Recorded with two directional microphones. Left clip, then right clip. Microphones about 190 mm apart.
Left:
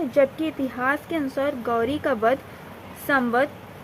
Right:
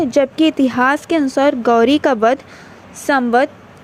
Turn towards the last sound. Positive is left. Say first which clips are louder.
# right 7 dB
turn(degrees=-35)  # may be behind; listen again after turning